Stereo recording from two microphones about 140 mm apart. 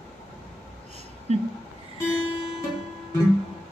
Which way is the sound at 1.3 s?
50° right (ahead or behind).